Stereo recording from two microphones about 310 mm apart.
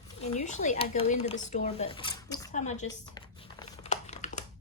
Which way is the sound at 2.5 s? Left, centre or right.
Left.